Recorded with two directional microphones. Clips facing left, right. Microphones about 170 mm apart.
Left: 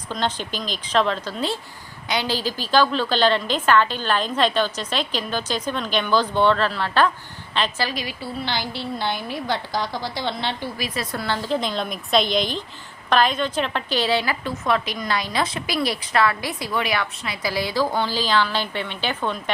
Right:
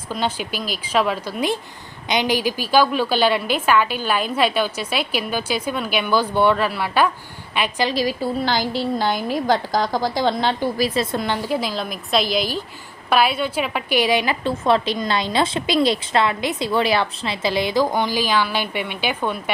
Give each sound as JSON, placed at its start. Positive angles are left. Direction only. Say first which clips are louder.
{"t": 0.1, "sound": "a woman's voice", "louder": "right 2 dB", "side_deg": -10}
{"t": 7.9, "sound": "a woman's voice", "louder": "right 8 dB", "side_deg": -40}
{"t": 14.4, "sound": "a woman's voice", "louder": "right 5 dB", "side_deg": -30}